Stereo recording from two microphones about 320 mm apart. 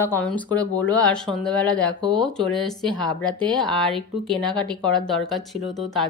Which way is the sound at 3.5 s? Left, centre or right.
Centre.